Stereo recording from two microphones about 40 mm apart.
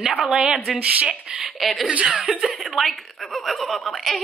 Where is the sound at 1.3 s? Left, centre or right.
Centre.